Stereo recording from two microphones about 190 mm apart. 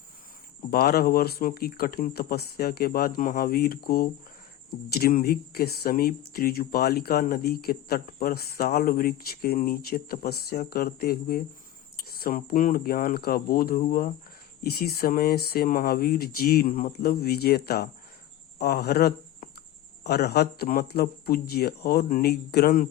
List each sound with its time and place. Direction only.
0.7 s speech: 55° left (ahead or behind)